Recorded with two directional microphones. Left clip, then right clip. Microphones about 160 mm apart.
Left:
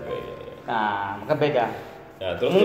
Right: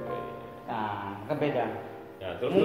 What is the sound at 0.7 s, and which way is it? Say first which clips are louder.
Speech: left 9 dB; 55° left (ahead or behind).